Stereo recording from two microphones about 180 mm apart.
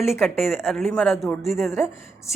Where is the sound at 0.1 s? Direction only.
Centre (ahead or behind).